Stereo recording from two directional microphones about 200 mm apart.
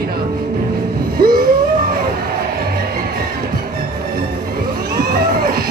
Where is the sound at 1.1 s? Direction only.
45° right (ahead or behind).